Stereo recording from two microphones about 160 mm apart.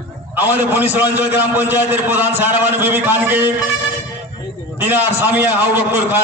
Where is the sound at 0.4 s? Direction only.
10° right (ahead or behind).